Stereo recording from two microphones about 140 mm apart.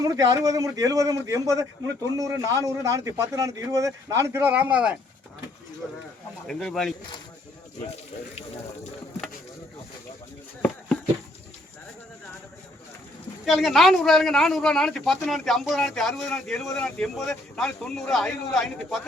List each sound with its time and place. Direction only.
0.0 s a man's voice: 25° right (ahead or behind); by 4.9 s 10° right (ahead or behind)
6.5 s speech: 5° left (ahead or behind)
13.4 s speech: centre (ahead or behind)